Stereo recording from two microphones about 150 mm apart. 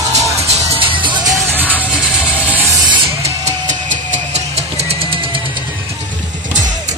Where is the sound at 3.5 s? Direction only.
50° right (ahead or behind).